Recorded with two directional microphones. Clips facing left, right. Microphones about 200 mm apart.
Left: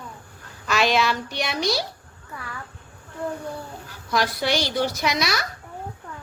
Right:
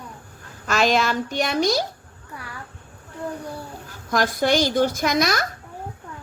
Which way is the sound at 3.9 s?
45° right (ahead or behind).